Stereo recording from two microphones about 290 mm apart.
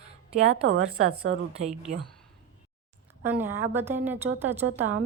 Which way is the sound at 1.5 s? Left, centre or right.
Right.